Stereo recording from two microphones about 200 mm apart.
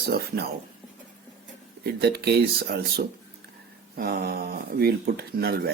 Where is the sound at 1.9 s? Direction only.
50° right (ahead or behind).